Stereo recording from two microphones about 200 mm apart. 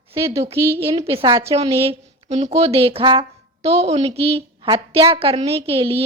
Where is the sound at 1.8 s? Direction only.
30° right (ahead or behind).